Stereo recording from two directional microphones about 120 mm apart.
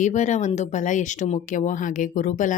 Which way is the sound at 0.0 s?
90° left.